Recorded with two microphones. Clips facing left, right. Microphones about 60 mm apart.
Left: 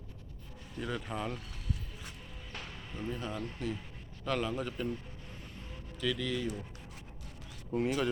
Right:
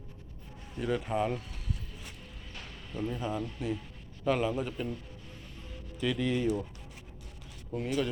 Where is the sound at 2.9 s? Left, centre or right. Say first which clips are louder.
Right 4 dB; centre.